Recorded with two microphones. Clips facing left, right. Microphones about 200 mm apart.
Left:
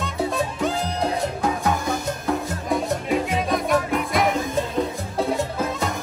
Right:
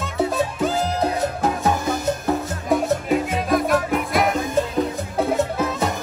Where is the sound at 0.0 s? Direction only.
5° right (ahead or behind).